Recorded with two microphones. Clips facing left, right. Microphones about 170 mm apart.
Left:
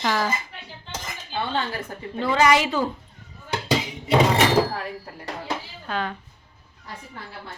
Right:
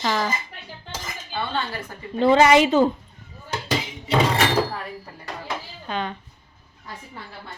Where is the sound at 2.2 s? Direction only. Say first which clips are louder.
Right 5 dB; 25° right (ahead or behind).